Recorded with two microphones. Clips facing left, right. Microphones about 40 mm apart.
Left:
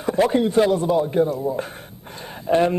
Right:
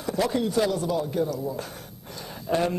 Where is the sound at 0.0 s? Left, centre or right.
Left.